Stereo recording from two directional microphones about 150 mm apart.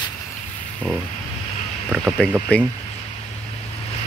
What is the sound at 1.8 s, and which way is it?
Speech, centre (ahead or behind).